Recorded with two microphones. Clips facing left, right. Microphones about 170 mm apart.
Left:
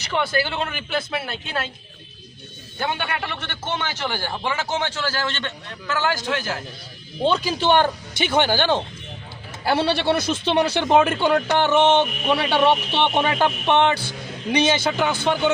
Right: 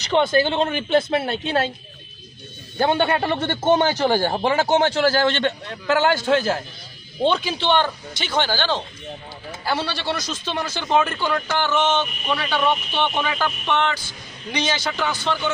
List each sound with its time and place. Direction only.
0.1 s speech: 25° right (ahead or behind)
2.7 s a man's voice: 35° right (ahead or behind)
6.0 s speech: 30° right (ahead or behind)
7.2 s speech: centre (ahead or behind); by 8.8 s 15° left (ahead or behind)
9.7 s a man's voice: 60° left (ahead or behind)
10.8 s speech: 20° left (ahead or behind)
11.8 s a man's voice: 60° left (ahead or behind)
12.3 s speech: 25° left (ahead or behind)
13.9 s a man's voice: 65° left (ahead or behind)
14.8 s speech: 20° left (ahead or behind)